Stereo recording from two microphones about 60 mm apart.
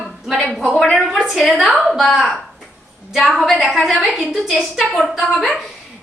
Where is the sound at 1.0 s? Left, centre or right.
Centre.